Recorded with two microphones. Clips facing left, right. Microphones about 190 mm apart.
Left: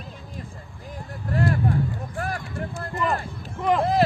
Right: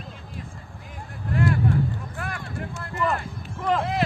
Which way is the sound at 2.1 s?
35° left (ahead or behind).